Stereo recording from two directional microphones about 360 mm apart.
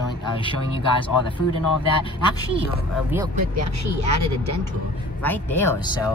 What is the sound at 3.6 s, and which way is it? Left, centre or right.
Speech, right.